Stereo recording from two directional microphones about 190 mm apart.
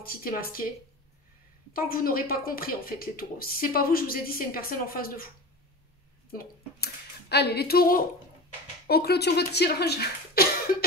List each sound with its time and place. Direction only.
0.0 s speech: 50° left (ahead or behind)
1.7 s speech: 50° left (ahead or behind)
6.3 s speech: 60° left (ahead or behind)